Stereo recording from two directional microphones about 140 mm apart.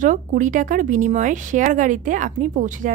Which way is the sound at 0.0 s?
70° right (ahead or behind).